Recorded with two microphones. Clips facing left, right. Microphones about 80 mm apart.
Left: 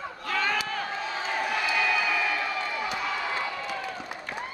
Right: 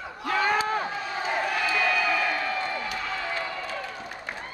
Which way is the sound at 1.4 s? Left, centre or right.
Centre.